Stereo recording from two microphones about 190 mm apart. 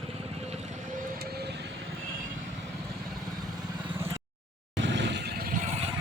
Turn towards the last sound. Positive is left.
turn(degrees=-70)  # may be behind; listen again after turning